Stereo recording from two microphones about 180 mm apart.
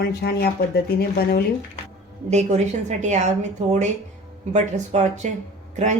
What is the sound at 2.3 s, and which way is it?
A woman's voice, 40° right (ahead or behind).